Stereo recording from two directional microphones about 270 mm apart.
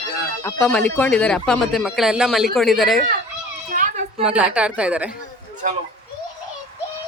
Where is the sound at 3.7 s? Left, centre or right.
Right.